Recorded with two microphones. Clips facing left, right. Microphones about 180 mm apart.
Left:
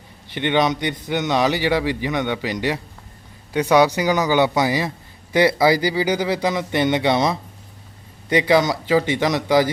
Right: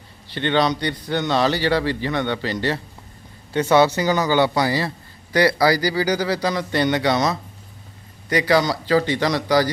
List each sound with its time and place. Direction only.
0.3 s speech: 15° left (ahead or behind)